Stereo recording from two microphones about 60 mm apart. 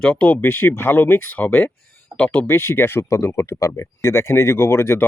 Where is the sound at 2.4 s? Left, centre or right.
Left.